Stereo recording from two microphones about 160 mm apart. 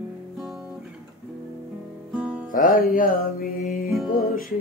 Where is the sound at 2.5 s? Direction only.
60° left (ahead or behind).